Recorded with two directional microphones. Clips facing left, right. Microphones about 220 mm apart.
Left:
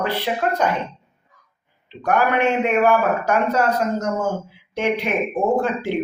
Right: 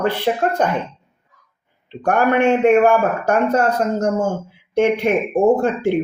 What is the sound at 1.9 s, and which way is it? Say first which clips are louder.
Speech: right 3 dB; 50° right (ahead or behind).